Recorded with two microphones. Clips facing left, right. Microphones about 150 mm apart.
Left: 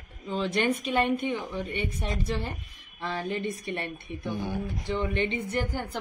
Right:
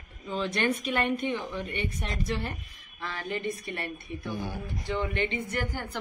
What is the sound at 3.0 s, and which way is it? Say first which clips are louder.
A woman's voice: left 3 dB; 25° left (ahead or behind).